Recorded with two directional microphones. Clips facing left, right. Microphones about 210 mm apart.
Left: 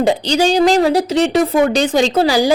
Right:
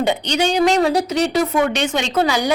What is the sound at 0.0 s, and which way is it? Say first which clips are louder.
A woman's voice: left 4 dB; 30° left (ahead or behind).